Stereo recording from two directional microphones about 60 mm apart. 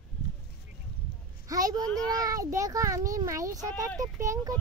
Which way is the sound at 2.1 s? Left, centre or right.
Right.